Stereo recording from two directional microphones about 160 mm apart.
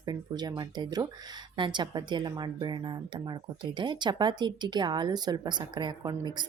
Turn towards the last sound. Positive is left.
turn(degrees=-25)  # may be behind; listen again after turning